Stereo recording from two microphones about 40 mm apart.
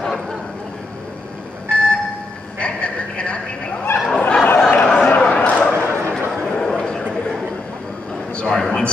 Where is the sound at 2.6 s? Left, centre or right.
Left.